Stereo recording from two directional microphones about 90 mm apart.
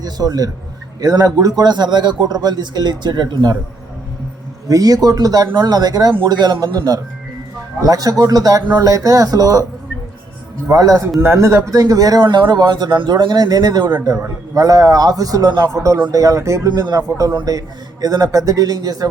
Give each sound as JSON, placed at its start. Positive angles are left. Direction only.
{"t": 0.0, "sound": "a man's voice", "side_deg": -45}
{"t": 4.7, "sound": "a man's voice", "side_deg": -45}
{"t": 10.8, "sound": "a man's voice", "side_deg": -40}
{"t": 16.6, "sound": "a man's voice", "side_deg": -50}